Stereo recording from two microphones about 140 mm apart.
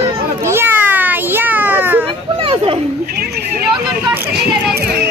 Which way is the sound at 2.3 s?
40° right (ahead or behind).